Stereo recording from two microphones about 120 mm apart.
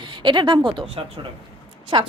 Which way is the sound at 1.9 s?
45° right (ahead or behind).